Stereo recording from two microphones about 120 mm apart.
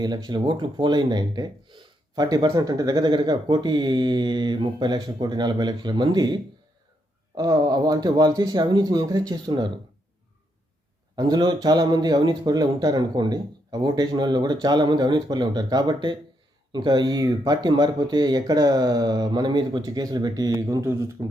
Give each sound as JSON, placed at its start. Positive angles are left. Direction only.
{"t": 0.0, "sound": "speech", "side_deg": -35}
{"t": 11.2, "sound": "speech", "side_deg": -35}